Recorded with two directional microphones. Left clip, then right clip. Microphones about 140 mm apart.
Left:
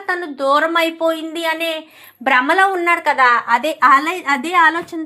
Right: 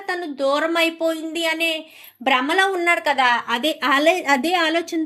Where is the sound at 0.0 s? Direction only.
15° right (ahead or behind).